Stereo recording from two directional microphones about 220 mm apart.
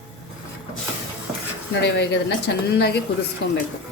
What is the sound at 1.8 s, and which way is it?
A woman's voice, 50° left (ahead or behind).